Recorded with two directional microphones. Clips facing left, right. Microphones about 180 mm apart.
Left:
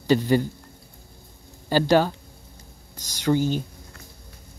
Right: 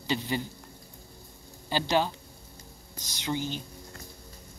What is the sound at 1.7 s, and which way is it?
Speech, 45° left (ahead or behind).